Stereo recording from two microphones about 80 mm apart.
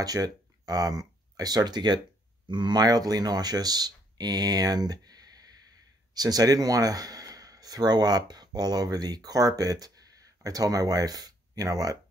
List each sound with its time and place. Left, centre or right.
0.0 s speech: right